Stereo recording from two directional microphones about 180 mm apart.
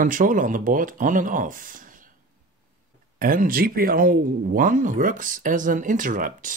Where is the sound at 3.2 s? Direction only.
50° right (ahead or behind).